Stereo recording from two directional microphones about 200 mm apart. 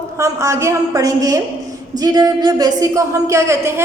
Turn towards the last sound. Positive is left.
turn(degrees=-15)  # may be behind; listen again after turning